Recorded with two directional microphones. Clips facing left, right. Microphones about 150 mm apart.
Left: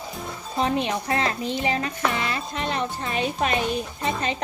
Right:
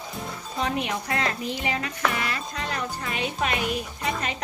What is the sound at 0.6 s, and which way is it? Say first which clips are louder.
A child's voice: left 4 dB; 30° left (ahead or behind).